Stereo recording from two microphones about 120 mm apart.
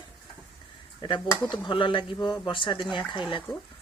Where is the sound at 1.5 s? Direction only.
40° left (ahead or behind).